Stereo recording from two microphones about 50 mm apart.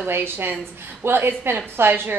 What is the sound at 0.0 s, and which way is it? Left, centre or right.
Speech, right.